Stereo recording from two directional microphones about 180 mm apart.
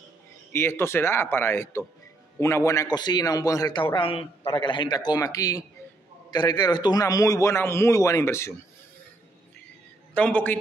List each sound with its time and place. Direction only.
0.5 s a man's voice: 15° left (ahead or behind)
10.1 s a man's voice: 10° left (ahead or behind)